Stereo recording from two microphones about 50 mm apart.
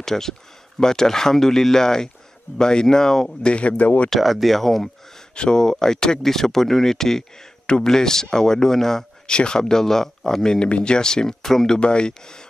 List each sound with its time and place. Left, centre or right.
0.0 s speech: centre; by 4.1 s left
4.1 s speech: centre
5.3 s speech: centre